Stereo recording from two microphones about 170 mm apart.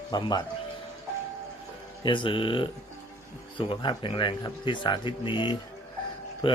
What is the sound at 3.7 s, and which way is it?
Speech, 30° left (ahead or behind).